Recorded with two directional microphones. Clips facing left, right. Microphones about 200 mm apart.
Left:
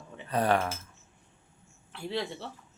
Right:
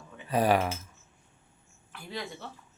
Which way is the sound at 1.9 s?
30° left (ahead or behind).